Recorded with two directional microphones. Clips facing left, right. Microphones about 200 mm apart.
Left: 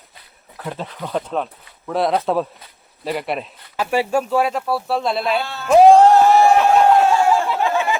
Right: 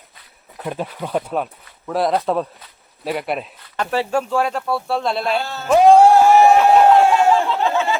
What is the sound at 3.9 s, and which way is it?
Speech, 10° left (ahead or behind).